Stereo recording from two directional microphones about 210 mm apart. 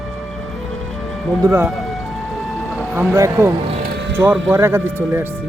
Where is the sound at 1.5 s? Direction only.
10° right (ahead or behind).